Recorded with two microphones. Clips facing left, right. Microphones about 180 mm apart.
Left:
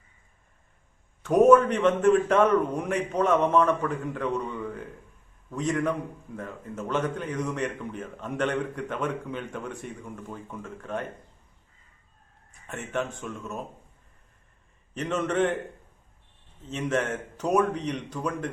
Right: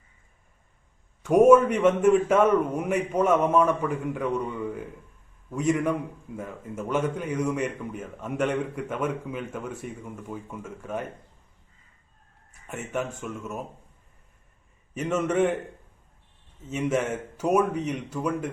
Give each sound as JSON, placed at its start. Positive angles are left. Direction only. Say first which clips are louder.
{"t": 1.2, "sound": "a man's voice", "louder": "right 1 dB", "side_deg": -10}
{"t": 12.6, "sound": "a man's voice", "louder": "even", "side_deg": -5}
{"t": 14.9, "sound": "a man's voice", "louder": "right 2 dB", "side_deg": -10}
{"t": 16.6, "sound": "a man's voice", "louder": "right 2 dB", "side_deg": -10}